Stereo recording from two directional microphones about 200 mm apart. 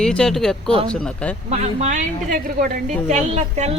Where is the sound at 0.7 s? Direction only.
30° right (ahead or behind).